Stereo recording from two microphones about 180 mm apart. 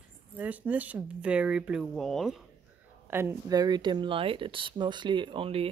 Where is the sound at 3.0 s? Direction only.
15° right (ahead or behind); by 5.7 s 30° right (ahead or behind).